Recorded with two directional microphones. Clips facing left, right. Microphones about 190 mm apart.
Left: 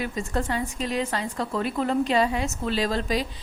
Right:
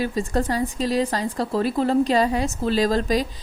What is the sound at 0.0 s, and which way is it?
Speech, 35° right (ahead or behind).